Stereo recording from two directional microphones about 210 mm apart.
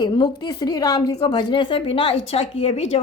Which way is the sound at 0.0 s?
20° left (ahead or behind).